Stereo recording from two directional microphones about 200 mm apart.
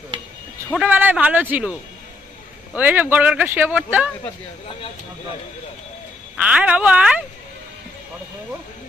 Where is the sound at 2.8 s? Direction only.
10° right (ahead or behind).